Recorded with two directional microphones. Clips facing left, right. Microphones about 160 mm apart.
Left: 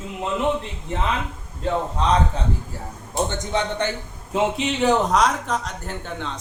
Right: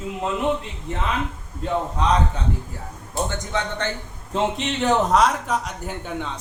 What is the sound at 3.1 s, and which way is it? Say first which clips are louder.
Speech: left 2 dB; 20° left (ahead or behind).